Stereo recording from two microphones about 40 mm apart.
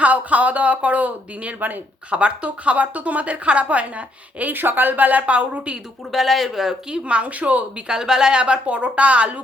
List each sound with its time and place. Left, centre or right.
0.0 s a woman's voice: right
2.0 s a woman's voice: right
4.5 s a woman's voice: right
6.1 s speech: centre
6.9 s a woman's voice: right
7.9 s a woman's voice: centre